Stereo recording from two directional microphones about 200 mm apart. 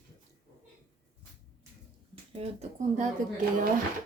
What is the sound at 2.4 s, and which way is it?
Speech, 30° right (ahead or behind).